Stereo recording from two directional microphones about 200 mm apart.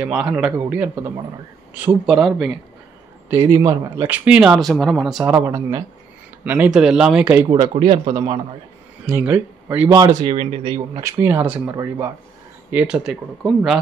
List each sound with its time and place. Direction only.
0.0 s a man's voice: 5° right (ahead or behind)
3.3 s speech: 15° right (ahead or behind)
5.2 s a man's voice: 15° right (ahead or behind)
7.4 s speech: 20° right (ahead or behind)
9.0 s a man's voice: 10° right (ahead or behind)
10.2 s speech: 30° right (ahead or behind)
11.0 s a man's voice: 15° right (ahead or behind)